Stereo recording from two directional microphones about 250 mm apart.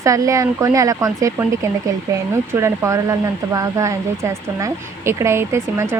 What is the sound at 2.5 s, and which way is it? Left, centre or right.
Speech, centre.